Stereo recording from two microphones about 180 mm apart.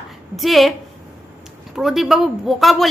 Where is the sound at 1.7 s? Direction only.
Centre (ahead or behind).